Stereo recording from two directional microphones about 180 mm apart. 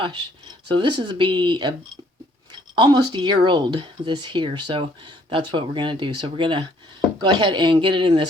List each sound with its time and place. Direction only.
0.7 s speech: 25° right (ahead or behind)
2.7 s speech: 25° right (ahead or behind)